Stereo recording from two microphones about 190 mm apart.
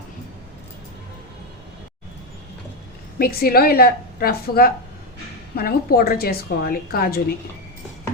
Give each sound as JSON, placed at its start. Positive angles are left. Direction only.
{"t": 3.2, "sound": "a woman's voice", "side_deg": 50}